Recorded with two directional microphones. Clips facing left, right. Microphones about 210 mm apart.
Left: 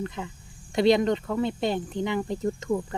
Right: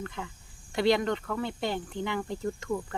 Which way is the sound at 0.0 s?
20° left (ahead or behind).